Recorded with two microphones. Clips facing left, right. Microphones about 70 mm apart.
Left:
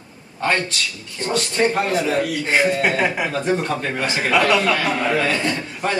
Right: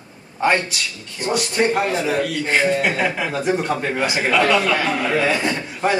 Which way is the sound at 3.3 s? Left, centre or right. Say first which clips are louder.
Even; centre.